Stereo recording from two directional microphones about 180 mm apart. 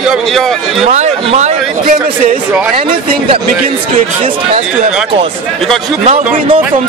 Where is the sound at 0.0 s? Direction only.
Centre (ahead or behind).